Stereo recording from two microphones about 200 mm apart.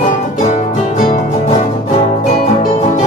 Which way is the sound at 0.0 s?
40° left (ahead or behind).